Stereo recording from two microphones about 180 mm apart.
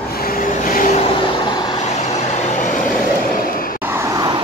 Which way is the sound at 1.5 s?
25° left (ahead or behind).